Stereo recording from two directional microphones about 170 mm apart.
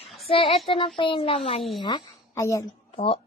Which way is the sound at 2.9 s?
35° left (ahead or behind).